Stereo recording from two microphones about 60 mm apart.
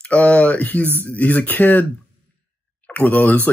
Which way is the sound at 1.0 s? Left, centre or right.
Left.